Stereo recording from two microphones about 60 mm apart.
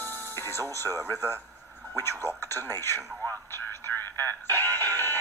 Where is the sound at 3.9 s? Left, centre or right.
Left.